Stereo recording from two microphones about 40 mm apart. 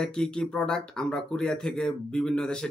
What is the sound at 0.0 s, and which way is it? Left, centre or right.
Speech, centre.